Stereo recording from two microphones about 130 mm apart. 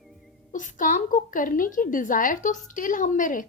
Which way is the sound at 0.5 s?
75° left (ahead or behind).